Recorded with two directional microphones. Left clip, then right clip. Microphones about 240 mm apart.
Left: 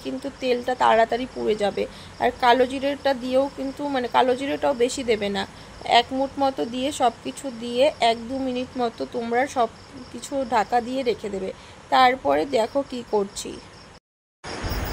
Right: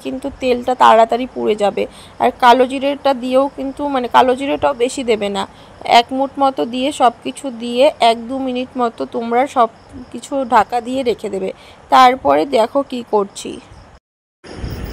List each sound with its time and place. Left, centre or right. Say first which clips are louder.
0.0 s speech: right 8 dB; centre